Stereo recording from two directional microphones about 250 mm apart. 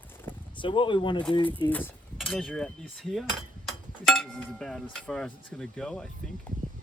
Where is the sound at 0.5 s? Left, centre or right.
Centre.